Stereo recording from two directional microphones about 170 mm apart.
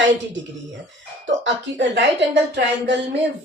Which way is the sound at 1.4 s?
90° right.